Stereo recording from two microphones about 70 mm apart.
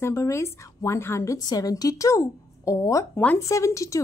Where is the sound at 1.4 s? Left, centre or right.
Left.